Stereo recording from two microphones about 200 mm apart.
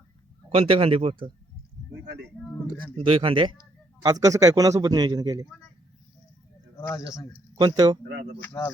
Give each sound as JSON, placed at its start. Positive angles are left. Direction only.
{"t": 0.5, "sound": "speech", "side_deg": -25}
{"t": 3.0, "sound": "a man's voice", "side_deg": -25}
{"t": 6.7, "sound": "a man's voice", "side_deg": 15}
{"t": 7.6, "sound": "speech", "side_deg": -20}
{"t": 8.4, "sound": "a man's voice", "side_deg": 10}